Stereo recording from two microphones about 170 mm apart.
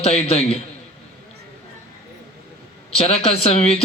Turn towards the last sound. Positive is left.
turn(degrees=35)  # may be behind; listen again after turning